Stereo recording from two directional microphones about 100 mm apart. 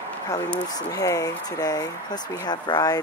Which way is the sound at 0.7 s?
40° left (ahead or behind).